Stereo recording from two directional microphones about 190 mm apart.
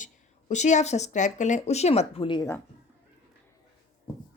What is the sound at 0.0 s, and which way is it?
Speech, 40° left (ahead or behind).